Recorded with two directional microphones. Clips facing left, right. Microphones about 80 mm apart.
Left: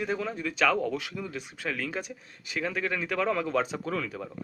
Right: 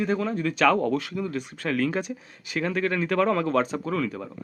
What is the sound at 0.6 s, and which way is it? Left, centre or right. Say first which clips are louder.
Speech: right 4 dB; right.